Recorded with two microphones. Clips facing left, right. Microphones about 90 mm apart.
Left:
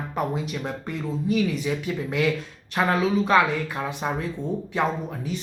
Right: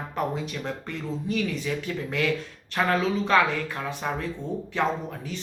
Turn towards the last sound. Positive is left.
turn(degrees=15)  # may be behind; listen again after turning